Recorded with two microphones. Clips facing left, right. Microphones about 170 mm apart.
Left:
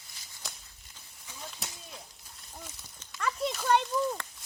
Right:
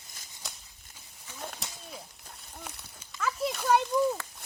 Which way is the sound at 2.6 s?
65° right (ahead or behind).